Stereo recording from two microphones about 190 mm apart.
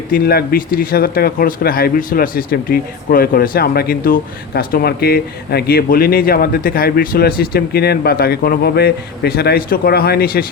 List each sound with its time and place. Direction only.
0.1 s speech: 55° left (ahead or behind)